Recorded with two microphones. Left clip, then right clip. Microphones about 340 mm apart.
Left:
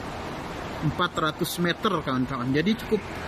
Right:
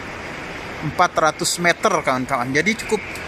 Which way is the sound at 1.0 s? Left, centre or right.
Centre.